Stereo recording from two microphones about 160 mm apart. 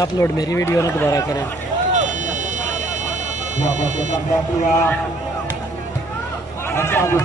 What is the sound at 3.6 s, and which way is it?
Speech, 50° right (ahead or behind).